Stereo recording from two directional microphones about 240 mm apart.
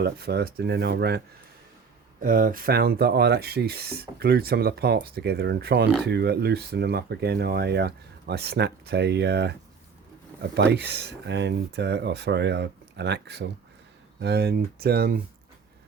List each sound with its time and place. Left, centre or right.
0.0 s speech: right
2.2 s speech: right